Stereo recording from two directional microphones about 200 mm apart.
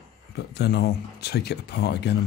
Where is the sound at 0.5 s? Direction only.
50° left (ahead or behind).